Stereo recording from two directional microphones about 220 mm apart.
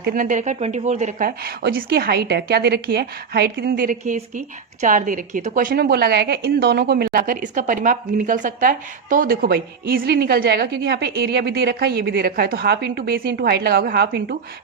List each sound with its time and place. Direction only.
0.0 s speech: 40° right (ahead or behind)